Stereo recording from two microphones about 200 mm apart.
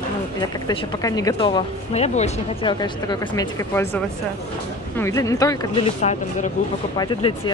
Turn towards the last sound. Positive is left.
turn(degrees=25)  # may be behind; listen again after turning